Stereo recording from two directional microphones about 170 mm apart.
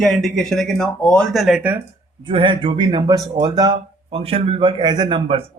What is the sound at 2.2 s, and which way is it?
A man's voice, 30° right (ahead or behind).